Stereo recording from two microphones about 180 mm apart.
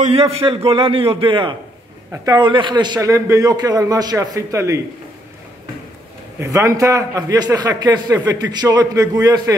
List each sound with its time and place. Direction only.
0.0 s a man's voice: 35° right (ahead or behind); by 4.8 s 15° right (ahead or behind)
6.4 s a man's voice: 15° right (ahead or behind)